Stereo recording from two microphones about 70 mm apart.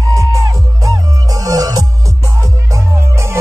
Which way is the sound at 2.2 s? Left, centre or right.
Right.